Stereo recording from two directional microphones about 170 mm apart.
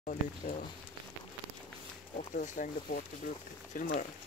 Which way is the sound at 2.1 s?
45° left (ahead or behind).